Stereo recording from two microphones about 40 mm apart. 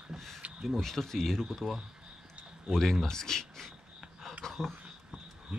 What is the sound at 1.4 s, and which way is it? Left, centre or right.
Speech, centre.